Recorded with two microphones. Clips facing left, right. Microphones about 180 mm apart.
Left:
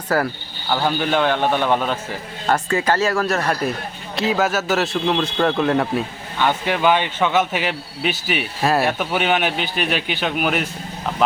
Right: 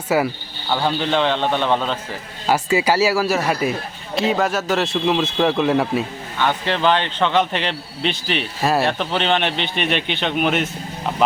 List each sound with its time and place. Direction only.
0.1 s a man's voice: 5° right (ahead or behind); by 2.0 s 10° left (ahead or behind)
2.5 s speech: 10° right (ahead or behind)
6.4 s speech: 10° left (ahead or behind)